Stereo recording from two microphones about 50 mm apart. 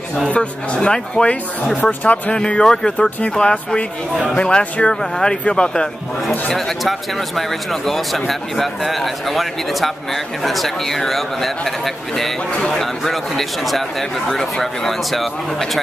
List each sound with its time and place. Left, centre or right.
0.3 s speech: left
1.8 s speech: left
2.3 s speech: centre
6.5 s speech: centre